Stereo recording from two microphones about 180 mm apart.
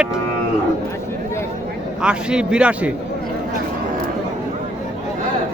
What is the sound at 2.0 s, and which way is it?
Speech, 5° right (ahead or behind).